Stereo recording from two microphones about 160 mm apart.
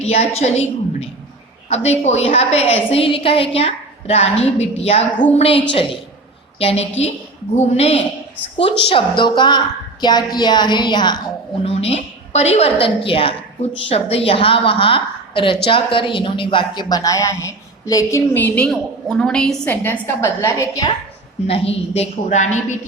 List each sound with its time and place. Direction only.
0.0 s a woman's voice: 40° left (ahead or behind)
6.6 s a woman's voice: 40° left (ahead or behind)
11.6 s a woman's voice: 40° left (ahead or behind); by 20.9 s 20° left (ahead or behind)
21.4 s a woman's voice: 40° left (ahead or behind)